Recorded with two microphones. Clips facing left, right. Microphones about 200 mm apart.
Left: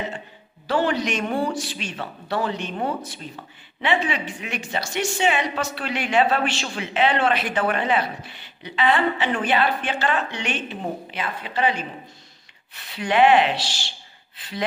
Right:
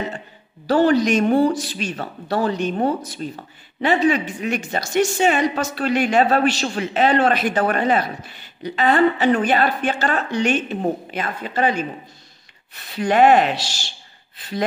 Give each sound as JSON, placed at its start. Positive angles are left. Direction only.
{"t": 0.7, "sound": "a woman's voice", "side_deg": -40}